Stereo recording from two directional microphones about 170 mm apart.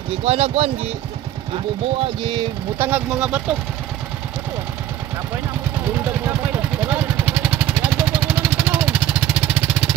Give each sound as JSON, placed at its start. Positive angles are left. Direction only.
{"t": 0.2, "sound": "speech", "side_deg": -35}
{"t": 2.8, "sound": "speech", "side_deg": -10}
{"t": 6.2, "sound": "vehicle", "side_deg": -10}